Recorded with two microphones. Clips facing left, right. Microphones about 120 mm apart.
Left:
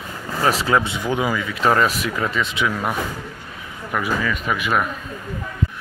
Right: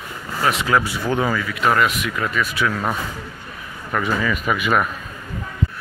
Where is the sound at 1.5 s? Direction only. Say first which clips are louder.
Left 3 dB; 30° left (ahead or behind).